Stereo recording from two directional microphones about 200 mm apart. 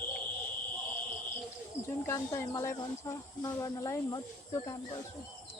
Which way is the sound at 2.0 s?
15° left (ahead or behind).